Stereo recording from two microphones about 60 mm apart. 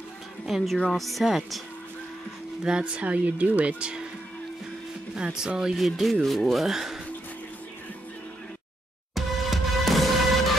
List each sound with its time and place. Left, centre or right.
0.5 s speech: centre
2.6 s speech: centre
5.1 s speech: centre
9.1 s music: centre